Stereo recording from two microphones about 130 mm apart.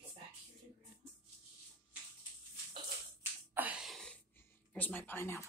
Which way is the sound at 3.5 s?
10° right (ahead or behind).